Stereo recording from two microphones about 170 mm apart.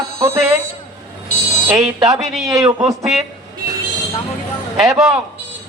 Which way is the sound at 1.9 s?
20° right (ahead or behind).